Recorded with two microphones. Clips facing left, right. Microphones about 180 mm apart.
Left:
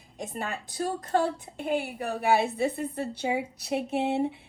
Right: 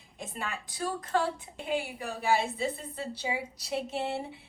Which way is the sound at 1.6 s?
60° left (ahead or behind).